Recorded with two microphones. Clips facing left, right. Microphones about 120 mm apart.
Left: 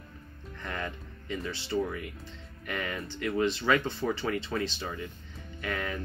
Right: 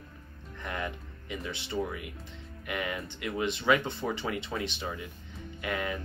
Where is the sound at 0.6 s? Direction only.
15° right (ahead or behind).